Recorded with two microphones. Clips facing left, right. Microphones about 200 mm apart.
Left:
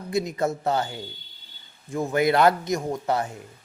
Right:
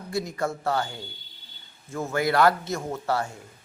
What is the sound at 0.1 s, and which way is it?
Speech, 20° left (ahead or behind).